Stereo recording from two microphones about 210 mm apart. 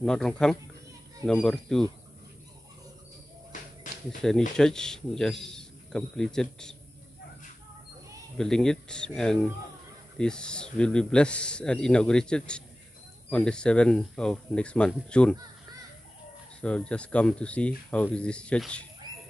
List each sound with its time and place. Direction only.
0.0 s a man's voice: 5° left (ahead or behind)
3.9 s insect: 35° left (ahead or behind)
4.2 s a man's voice: centre (ahead or behind)
8.4 s a man's voice: 5° left (ahead or behind)
16.6 s a man's voice: 5° left (ahead or behind)